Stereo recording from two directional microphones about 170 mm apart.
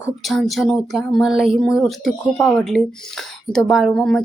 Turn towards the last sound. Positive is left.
turn(degrees=0)  # may be behind; listen again after turning